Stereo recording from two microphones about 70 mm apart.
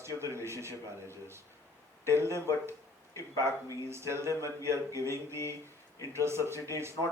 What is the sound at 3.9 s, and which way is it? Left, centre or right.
Mantra, right.